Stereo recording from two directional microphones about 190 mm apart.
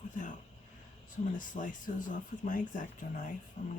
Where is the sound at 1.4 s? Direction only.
45° left (ahead or behind).